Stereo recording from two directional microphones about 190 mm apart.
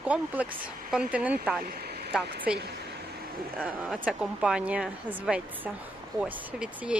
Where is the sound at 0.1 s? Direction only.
5° right (ahead or behind).